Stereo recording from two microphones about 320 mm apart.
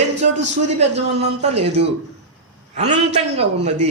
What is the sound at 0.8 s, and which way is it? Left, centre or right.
Speech, centre.